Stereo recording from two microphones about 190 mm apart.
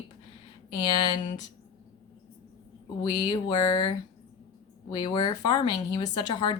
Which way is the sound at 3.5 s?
20° left (ahead or behind).